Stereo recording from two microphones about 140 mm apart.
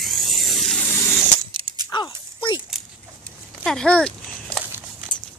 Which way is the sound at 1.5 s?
35° right (ahead or behind).